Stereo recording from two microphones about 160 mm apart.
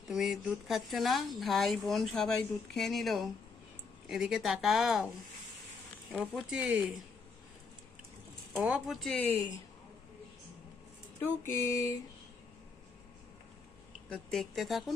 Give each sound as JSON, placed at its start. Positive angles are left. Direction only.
{"t": 0.1, "sound": "speech", "side_deg": 0}
{"t": 6.1, "sound": "speech", "side_deg": -5}
{"t": 8.5, "sound": "speech", "side_deg": 0}
{"t": 11.2, "sound": "a sound", "side_deg": 15}
{"t": 14.1, "sound": "speech", "side_deg": 5}